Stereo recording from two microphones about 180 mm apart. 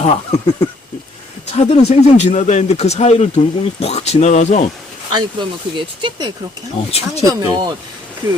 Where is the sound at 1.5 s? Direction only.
35° left (ahead or behind).